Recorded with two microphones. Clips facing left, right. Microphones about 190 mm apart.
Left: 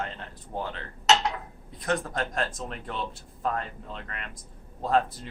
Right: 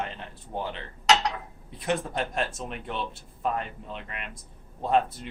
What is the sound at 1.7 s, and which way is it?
Speech, 25° right (ahead or behind).